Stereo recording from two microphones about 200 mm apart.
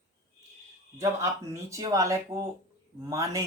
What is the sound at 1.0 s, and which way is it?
Speech, 15° right (ahead or behind).